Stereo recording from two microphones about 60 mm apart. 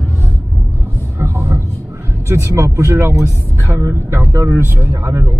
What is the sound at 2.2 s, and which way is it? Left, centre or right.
Speech, right.